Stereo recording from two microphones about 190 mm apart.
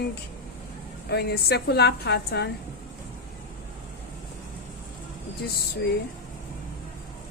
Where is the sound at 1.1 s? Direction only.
60° left (ahead or behind).